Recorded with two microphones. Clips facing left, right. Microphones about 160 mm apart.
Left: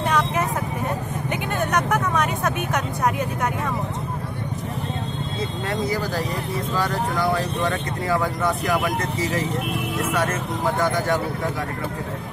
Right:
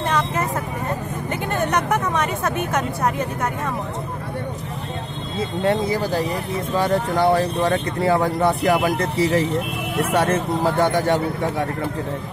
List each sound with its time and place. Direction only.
5.6 s speech: 25° right (ahead or behind)